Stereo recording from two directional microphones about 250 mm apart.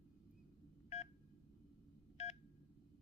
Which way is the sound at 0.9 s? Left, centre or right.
Left.